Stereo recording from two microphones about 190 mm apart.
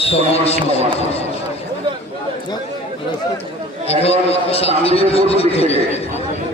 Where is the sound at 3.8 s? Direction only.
30° left (ahead or behind).